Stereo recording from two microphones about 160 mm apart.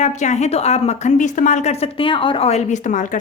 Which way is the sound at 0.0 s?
45° left (ahead or behind).